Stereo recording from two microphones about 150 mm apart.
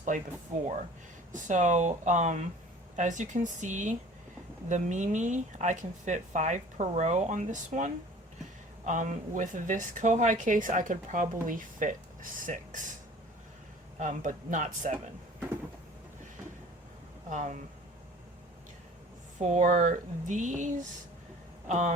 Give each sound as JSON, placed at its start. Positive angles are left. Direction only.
{"t": 0.1, "sound": "speech", "side_deg": -60}
{"t": 1.3, "sound": "speech", "side_deg": -55}
{"t": 14.0, "sound": "speech", "side_deg": -60}
{"t": 17.2, "sound": "speech", "side_deg": -55}
{"t": 19.4, "sound": "speech", "side_deg": -50}
{"t": 21.7, "sound": "speech", "side_deg": -50}